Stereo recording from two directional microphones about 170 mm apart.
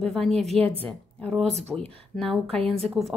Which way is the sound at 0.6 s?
35° right (ahead or behind).